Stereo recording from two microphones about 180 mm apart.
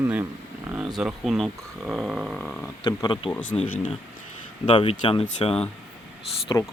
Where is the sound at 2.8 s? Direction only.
20° left (ahead or behind).